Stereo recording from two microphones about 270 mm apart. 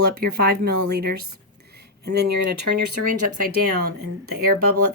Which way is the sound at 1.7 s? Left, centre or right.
Right.